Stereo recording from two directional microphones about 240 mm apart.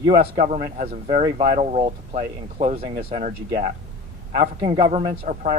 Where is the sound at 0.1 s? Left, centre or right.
Right.